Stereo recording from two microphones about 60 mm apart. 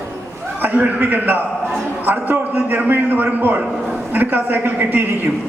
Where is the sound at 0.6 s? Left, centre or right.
Right.